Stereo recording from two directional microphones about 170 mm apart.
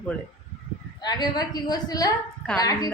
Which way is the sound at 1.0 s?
25° left (ahead or behind).